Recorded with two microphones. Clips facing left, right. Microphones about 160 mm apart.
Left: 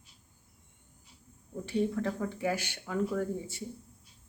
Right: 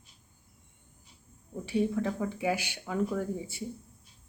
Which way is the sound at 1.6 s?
10° right (ahead or behind).